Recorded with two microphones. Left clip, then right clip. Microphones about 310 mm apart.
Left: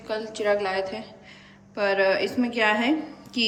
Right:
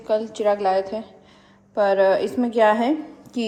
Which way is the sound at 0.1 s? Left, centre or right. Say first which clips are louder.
Right 4 dB; centre.